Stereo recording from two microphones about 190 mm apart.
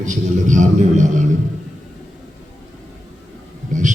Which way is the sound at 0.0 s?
40° right (ahead or behind).